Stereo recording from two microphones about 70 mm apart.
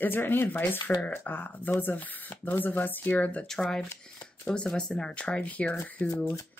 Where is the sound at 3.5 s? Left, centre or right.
Centre; by 6.1 s left.